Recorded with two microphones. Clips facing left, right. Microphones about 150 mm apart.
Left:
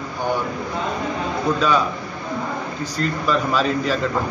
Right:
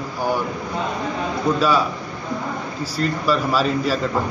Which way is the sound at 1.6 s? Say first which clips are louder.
Right 1 dB; 5° right (ahead or behind).